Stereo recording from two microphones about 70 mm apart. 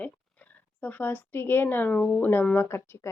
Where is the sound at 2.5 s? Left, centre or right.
Left.